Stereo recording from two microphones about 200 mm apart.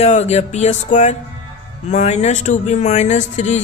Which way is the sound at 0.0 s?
35° left (ahead or behind).